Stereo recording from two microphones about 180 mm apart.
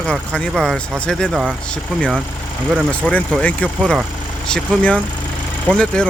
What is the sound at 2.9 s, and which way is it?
Speech, 10° left (ahead or behind).